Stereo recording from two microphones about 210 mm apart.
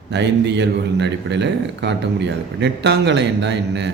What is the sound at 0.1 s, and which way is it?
A man's voice, 55° right (ahead or behind).